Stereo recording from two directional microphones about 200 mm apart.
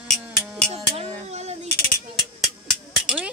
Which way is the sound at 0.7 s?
30° right (ahead or behind).